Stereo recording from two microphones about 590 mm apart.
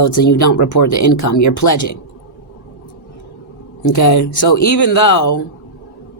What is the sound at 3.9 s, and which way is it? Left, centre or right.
Speech, left.